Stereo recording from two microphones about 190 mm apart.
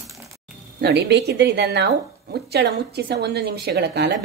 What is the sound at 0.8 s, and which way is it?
A woman's voice, 65° right (ahead or behind).